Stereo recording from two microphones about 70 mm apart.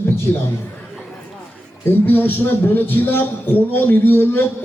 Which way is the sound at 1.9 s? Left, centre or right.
Left.